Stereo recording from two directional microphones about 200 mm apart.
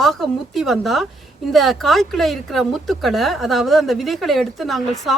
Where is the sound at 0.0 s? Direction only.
Centre (ahead or behind).